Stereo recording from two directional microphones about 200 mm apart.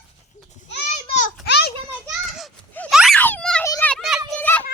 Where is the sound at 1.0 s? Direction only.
35° left (ahead or behind).